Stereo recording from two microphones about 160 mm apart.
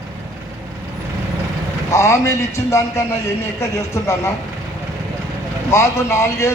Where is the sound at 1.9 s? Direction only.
20° left (ahead or behind).